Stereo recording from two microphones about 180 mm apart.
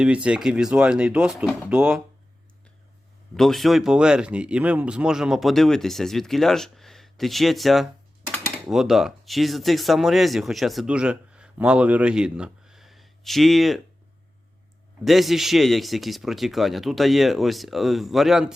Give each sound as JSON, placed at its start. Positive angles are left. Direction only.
{"t": 0.0, "sound": "speech", "side_deg": -5}
{"t": 3.3, "sound": "speech", "side_deg": 0}
{"t": 15.0, "sound": "speech", "side_deg": 0}